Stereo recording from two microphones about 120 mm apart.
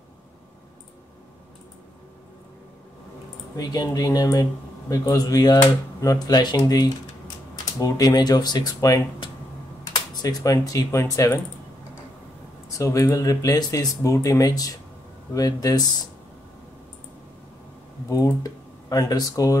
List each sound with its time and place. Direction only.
3.5 s speech: 30° left (ahead or behind)
10.2 s speech: 30° left (ahead or behind)
12.6 s speech: 25° left (ahead or behind)
18.1 s speech: 30° left (ahead or behind)